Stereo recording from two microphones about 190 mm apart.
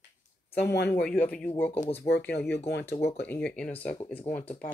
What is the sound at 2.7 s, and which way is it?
Speech, 60° left (ahead or behind).